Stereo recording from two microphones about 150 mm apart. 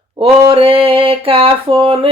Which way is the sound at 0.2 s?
35° right (ahead or behind).